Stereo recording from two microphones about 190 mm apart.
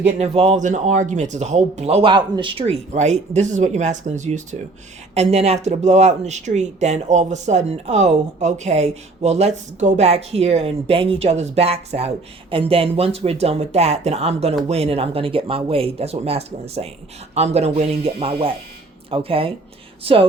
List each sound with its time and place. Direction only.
0.0 s speech: 35° right (ahead or behind)